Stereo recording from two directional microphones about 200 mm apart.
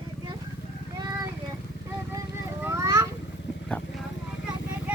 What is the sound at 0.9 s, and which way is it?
Vehicle, 20° right (ahead or behind).